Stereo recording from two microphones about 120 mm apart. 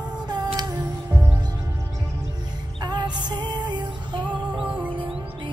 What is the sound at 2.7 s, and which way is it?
Music, 35° right (ahead or behind).